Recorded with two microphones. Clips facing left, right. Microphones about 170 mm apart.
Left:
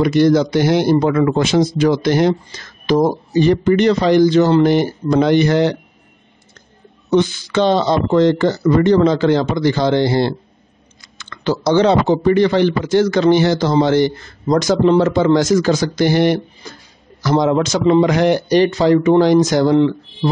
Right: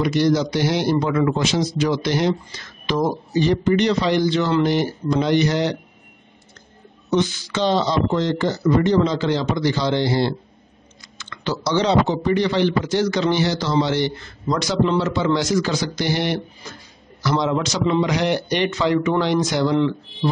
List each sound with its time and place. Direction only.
0.0 s speech: 55° left (ahead or behind); by 4.6 s 40° left (ahead or behind)
4.6 s speech: 55° left (ahead or behind)
7.1 s speech: 55° left (ahead or behind)